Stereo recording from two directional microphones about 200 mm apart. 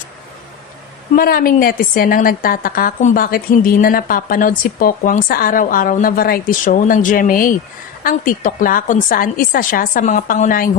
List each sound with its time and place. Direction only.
1.1 s a woman's voice: 45° left (ahead or behind)